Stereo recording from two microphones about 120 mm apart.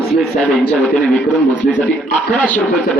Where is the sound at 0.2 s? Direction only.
5° left (ahead or behind).